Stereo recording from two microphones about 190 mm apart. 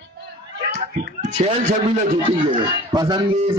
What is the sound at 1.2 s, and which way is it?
Speech, 40° right (ahead or behind).